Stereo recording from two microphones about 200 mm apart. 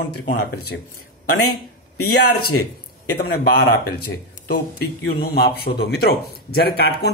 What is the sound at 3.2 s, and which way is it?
Speech, 50° left (ahead or behind).